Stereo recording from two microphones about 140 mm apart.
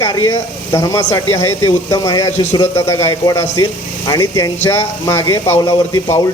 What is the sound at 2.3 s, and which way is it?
Speech, 55° left (ahead or behind).